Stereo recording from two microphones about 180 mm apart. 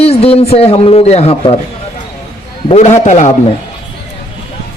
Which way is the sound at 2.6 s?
40° left (ahead or behind).